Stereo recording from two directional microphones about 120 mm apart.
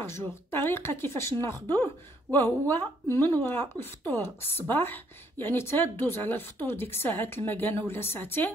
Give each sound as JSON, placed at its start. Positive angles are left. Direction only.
{"t": 0.0, "sound": "a woman's voice", "side_deg": 20}